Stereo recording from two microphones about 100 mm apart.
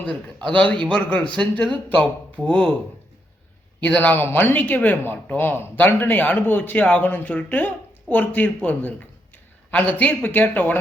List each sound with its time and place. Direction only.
0.3 s speech: 10° left (ahead or behind)
3.8 s speech: 15° left (ahead or behind)